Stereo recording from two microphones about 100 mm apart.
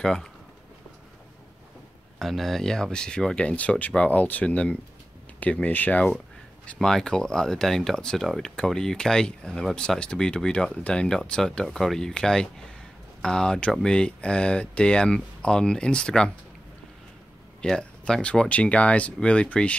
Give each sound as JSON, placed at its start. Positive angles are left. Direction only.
{"t": 0.0, "sound": "speech", "side_deg": 5}
{"t": 2.1, "sound": "speech", "side_deg": 0}
{"t": 17.6, "sound": "speech", "side_deg": 10}